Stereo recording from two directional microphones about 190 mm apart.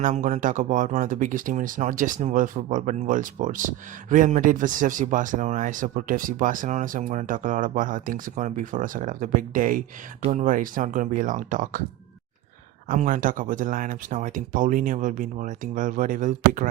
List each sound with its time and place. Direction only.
0.0 s speech: 40° right (ahead or behind)
12.9 s speech: 45° right (ahead or behind)